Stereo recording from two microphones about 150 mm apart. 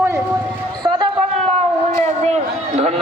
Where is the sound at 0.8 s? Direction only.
30° right (ahead or behind).